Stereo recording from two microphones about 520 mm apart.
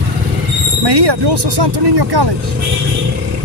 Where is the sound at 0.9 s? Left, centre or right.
Right.